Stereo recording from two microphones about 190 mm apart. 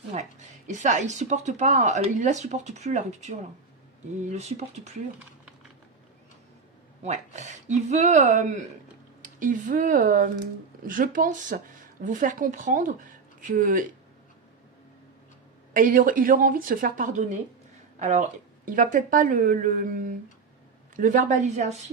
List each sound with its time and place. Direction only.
0.1 s speech: 40° right (ahead or behind)
7.0 s speech: 35° right (ahead or behind)
15.7 s speech: 45° right (ahead or behind)